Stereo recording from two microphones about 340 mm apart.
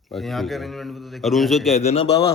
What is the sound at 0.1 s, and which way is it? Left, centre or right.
A man's voice, centre.